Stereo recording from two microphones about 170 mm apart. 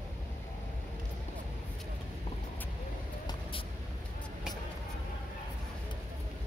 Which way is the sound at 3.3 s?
30° left (ahead or behind).